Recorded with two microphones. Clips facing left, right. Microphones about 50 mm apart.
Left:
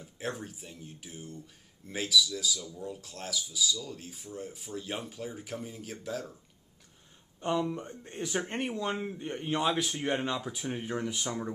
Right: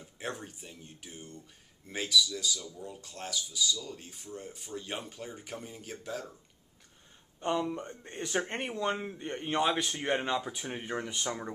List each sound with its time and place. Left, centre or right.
0.0 s speech: centre
7.3 s speech: centre